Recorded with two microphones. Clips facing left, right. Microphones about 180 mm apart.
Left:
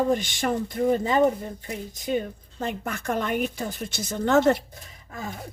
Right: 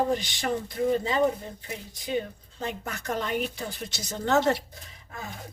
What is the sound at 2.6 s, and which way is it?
Speech, 55° left (ahead or behind).